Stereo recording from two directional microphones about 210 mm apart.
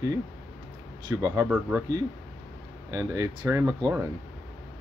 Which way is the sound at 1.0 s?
15° right (ahead or behind).